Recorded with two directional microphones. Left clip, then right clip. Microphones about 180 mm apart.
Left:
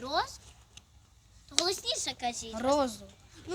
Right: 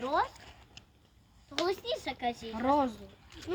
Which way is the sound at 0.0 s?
20° right (ahead or behind).